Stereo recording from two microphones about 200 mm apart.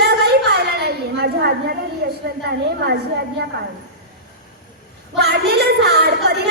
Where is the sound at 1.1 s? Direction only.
55° right (ahead or behind).